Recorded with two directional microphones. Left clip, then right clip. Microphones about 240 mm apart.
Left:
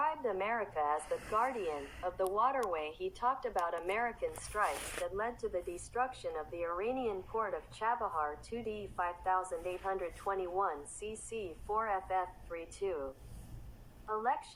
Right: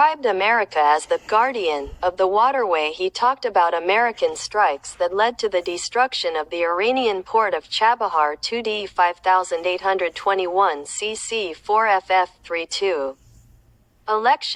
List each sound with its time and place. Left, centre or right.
0.0 s speech: right